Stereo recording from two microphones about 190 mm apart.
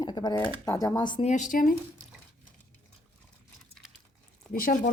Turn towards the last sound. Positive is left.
turn(degrees=45)  # may be behind; listen again after turning